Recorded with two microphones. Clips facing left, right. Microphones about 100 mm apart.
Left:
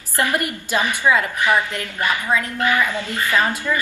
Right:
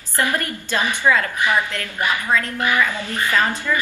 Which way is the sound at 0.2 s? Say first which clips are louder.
Left 1 dB; 15° left (ahead or behind).